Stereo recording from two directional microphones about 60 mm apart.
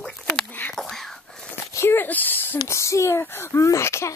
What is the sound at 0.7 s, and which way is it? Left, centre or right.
Whispering, centre.